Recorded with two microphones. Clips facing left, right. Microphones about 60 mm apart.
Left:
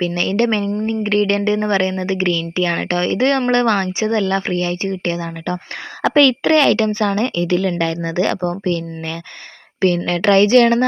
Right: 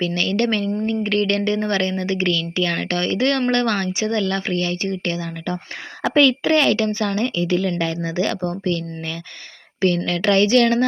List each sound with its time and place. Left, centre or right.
0.0 s a woman's voice: left
6.0 s a woman's voice: left